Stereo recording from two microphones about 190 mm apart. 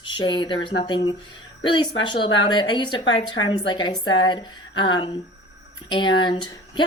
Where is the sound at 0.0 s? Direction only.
25° left (ahead or behind).